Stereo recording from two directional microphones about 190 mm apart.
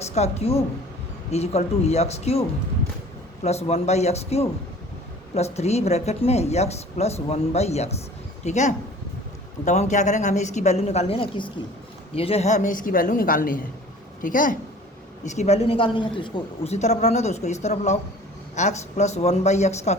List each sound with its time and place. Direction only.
0.0 s a woman's voice: 35° left (ahead or behind)
3.4 s a woman's voice: 35° left (ahead or behind)